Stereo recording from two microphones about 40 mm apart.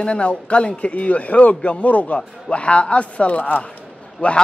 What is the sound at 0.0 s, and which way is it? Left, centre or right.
A man's voice, left.